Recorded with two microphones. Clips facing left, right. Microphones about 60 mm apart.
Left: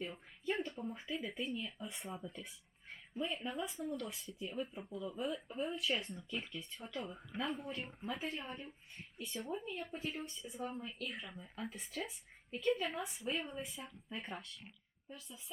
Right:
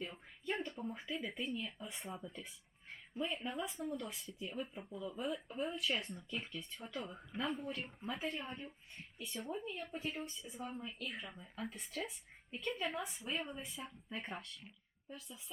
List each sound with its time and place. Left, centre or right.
0.0 s a sound: centre
0.8 s speech: centre
3.8 s speech: centre
4.1 s speech: centre